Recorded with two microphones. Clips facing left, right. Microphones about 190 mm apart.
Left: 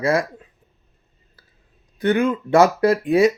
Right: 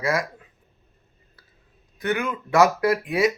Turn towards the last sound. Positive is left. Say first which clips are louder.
# left 5 dB
turn(degrees=30)  # may be behind; listen again after turning